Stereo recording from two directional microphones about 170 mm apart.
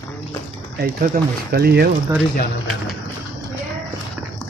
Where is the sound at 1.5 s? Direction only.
70° right (ahead or behind).